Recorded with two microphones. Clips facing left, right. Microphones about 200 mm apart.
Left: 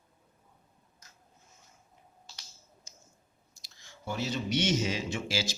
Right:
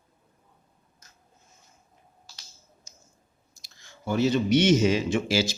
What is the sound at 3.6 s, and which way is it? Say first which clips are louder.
Speech: right 5 dB; 60° right (ahead or behind).